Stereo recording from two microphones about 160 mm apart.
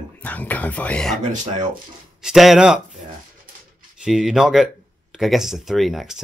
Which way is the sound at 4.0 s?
5° right (ahead or behind).